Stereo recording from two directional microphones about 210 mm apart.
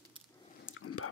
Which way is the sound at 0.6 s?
80° left.